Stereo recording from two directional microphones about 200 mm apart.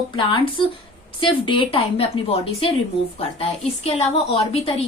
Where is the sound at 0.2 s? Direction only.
25° left (ahead or behind).